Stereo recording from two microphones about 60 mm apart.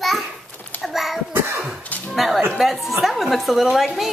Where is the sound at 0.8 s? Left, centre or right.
Centre.